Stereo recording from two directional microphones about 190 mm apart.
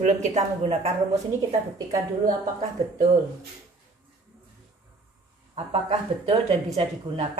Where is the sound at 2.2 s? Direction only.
35° right (ahead or behind).